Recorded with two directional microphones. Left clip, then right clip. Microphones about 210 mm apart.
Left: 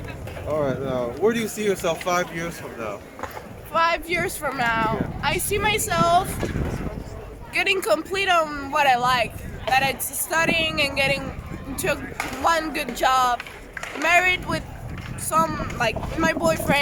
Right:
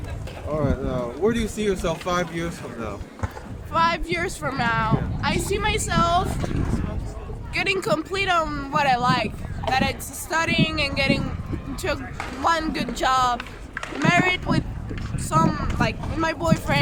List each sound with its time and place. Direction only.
0.5 s speech: 5° left (ahead or behind)
7.5 s speech: 5° right (ahead or behind)
13.3 s run: 30° right (ahead or behind)
14.0 s speech: 10° right (ahead or behind)